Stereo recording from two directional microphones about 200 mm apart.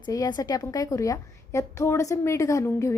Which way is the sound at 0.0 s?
20° left (ahead or behind).